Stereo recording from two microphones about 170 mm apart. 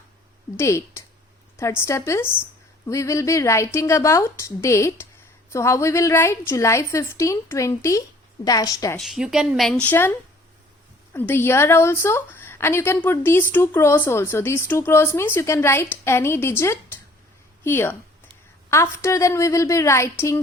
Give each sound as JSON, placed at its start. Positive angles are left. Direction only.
{"t": 0.5, "sound": "a woman's voice", "side_deg": 15}
{"t": 9.0, "sound": "a woman's voice", "side_deg": 0}